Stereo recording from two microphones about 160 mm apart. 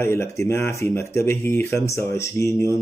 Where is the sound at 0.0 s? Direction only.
15° left (ahead or behind).